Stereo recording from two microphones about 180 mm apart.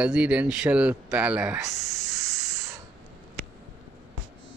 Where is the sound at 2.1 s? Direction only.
15° right (ahead or behind).